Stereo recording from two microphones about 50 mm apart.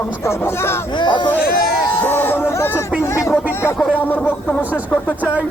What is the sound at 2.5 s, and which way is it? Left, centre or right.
Speech, left.